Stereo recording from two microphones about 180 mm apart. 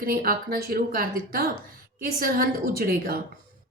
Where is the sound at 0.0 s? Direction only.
55° right (ahead or behind).